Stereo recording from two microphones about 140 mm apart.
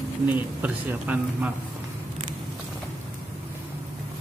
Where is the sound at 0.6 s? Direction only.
10° right (ahead or behind).